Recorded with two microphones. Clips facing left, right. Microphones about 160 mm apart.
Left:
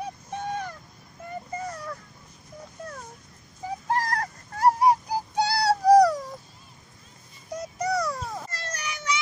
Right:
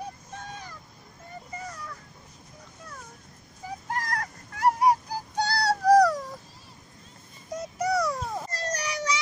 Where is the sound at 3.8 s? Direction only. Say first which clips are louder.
Left 5 dB; 35° left (ahead or behind).